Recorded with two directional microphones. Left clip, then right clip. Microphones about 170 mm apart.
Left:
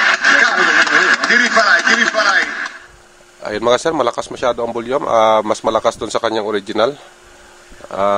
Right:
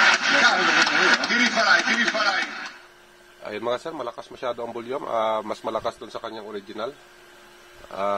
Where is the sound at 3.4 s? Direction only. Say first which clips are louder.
Left 13 dB; 25° left (ahead or behind).